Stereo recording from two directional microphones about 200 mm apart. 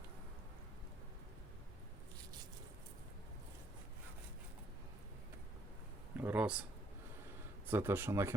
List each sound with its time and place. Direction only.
6.1 s speech: 10° right (ahead or behind)
7.7 s speech: 10° right (ahead or behind)